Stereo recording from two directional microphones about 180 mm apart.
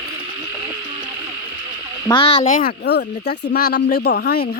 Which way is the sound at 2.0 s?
30° left (ahead or behind).